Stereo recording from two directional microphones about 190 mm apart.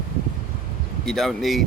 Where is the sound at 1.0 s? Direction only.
Centre (ahead or behind).